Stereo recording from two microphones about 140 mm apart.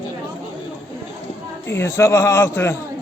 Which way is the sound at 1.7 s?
15° left (ahead or behind).